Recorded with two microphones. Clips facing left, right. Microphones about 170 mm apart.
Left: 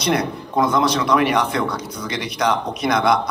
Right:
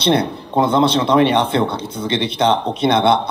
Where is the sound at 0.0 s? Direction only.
30° right (ahead or behind).